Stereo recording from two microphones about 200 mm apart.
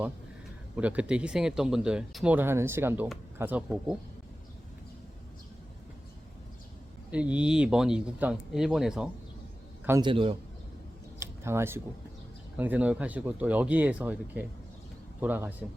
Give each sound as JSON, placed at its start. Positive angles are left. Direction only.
{"t": 0.8, "sound": "speech", "side_deg": -5}
{"t": 7.1, "sound": "speech", "side_deg": -5}
{"t": 10.0, "sound": "a man's voice", "side_deg": -25}
{"t": 11.2, "sound": "a sound", "side_deg": -15}
{"t": 12.5, "sound": "speech", "side_deg": -10}